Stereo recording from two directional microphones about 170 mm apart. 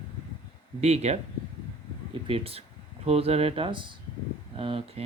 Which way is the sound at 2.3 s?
35° right (ahead or behind).